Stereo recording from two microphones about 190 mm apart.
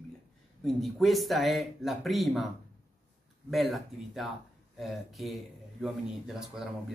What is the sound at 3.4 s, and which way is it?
Speech, centre (ahead or behind).